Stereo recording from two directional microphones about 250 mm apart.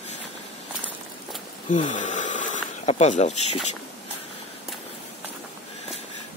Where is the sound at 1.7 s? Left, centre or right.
Left.